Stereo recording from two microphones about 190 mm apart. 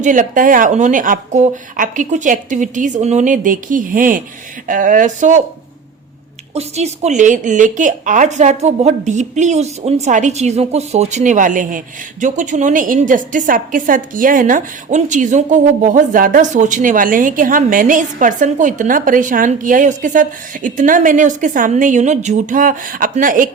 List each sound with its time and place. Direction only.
0.0 s a woman's voice: 45° right (ahead or behind)
6.5 s a woman's voice: 35° right (ahead or behind)